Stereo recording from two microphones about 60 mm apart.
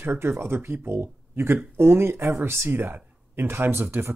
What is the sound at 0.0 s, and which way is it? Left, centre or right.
Speech, right.